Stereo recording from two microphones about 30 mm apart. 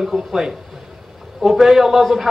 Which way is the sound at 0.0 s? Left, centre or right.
Centre.